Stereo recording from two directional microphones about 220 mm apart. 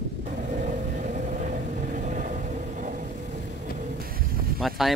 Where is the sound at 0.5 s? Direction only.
35° right (ahead or behind).